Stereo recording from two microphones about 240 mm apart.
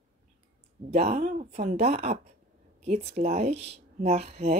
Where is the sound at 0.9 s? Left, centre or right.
Right.